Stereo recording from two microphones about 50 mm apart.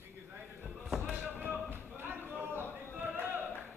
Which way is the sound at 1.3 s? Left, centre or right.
Right.